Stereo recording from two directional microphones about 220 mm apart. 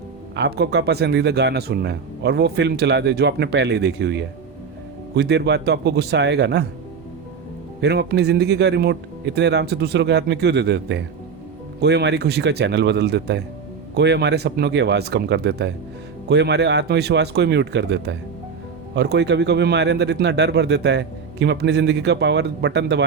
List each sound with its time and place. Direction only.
0.3 s speech: 50° right (ahead or behind)
7.8 s speech: 50° right (ahead or behind)